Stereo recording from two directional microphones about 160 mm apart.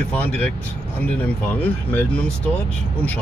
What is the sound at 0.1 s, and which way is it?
Speech, 10° left (ahead or behind).